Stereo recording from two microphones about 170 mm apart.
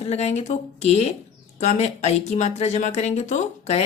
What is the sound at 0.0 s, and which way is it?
Speech, 40° left (ahead or behind).